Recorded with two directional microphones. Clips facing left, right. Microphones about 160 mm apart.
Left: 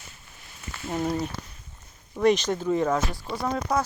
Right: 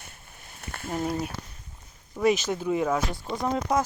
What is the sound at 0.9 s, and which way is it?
Speech, 10° right (ahead or behind).